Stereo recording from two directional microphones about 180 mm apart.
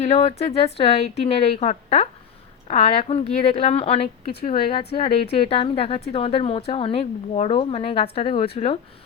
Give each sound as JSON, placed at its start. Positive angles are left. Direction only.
{"t": 0.0, "sound": "a woman's voice", "side_deg": 35}